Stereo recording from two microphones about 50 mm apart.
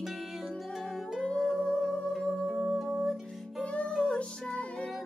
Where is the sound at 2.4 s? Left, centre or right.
Centre.